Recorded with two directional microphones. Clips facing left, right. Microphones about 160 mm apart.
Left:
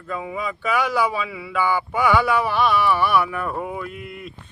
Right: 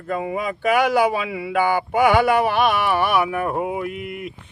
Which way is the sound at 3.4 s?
15° right (ahead or behind).